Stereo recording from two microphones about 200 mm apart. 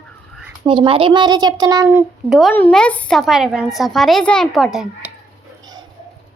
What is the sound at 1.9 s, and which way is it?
A woman's voice, 5° right (ahead or behind).